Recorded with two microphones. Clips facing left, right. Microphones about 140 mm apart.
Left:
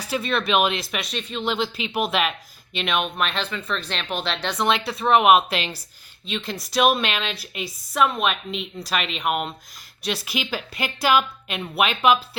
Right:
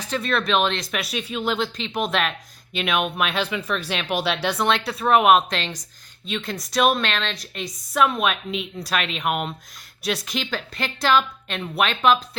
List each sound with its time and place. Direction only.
0.0 s a woman's voice: 5° left (ahead or behind)